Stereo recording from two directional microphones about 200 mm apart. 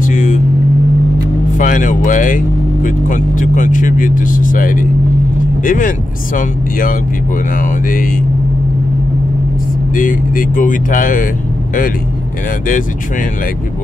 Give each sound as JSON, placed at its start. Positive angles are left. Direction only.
{"t": 0.0, "sound": "vehicle", "side_deg": 40}
{"t": 1.6, "sound": "speech", "side_deg": 40}
{"t": 9.9, "sound": "speech", "side_deg": 45}